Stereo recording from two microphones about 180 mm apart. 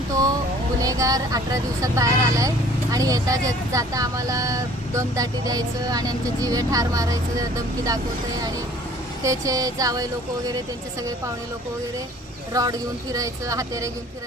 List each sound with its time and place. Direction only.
0.8 s speech: 20° right (ahead or behind)
9.2 s speech: 20° right (ahead or behind)
12.5 s speech: 20° right (ahead or behind)